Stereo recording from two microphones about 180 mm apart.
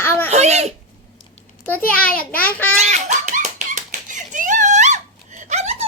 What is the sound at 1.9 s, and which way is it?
Speech, 10° left (ahead or behind).